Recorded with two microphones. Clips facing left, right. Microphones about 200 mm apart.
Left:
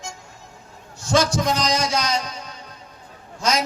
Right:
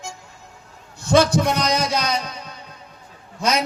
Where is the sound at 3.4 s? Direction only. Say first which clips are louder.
Right 1 dB; 60° right (ahead or behind).